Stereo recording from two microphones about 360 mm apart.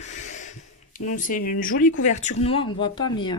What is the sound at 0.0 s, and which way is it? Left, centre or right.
Snort, centre.